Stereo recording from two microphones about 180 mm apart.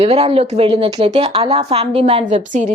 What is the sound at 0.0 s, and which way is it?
Speech, 35° right (ahead or behind).